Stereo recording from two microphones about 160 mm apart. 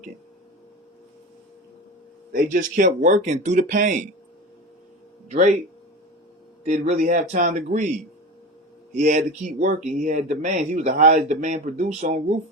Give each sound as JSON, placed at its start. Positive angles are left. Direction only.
{"t": 2.3, "sound": "speech", "side_deg": -55}
{"t": 5.3, "sound": "speech", "side_deg": -50}
{"t": 6.7, "sound": "speech", "side_deg": -45}
{"t": 8.9, "sound": "speech", "side_deg": -50}